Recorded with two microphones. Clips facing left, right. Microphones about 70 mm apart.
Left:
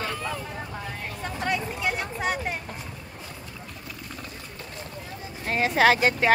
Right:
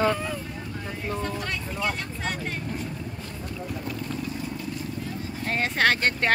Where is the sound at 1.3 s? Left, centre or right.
Centre.